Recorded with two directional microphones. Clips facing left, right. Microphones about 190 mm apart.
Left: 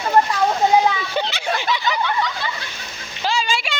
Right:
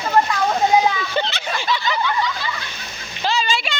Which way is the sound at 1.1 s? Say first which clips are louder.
Left 1 dB; 10° left (ahead or behind).